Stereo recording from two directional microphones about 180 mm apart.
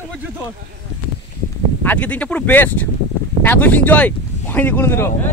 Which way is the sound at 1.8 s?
10° left (ahead or behind).